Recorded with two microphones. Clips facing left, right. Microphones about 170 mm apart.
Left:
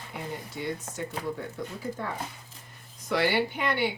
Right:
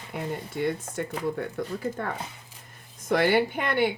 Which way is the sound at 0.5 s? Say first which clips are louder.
Right 8 dB; 55° right (ahead or behind).